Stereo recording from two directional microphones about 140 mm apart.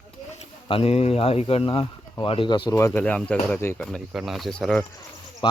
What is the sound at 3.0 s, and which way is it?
Speech, 10° left (ahead or behind).